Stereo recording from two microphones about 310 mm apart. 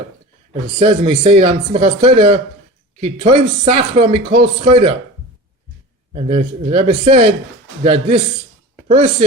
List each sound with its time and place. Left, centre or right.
0.8 s speech: centre
6.1 s speech: right